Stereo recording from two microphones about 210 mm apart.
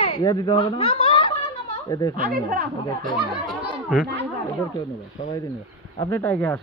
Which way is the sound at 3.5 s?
Centre (ahead or behind).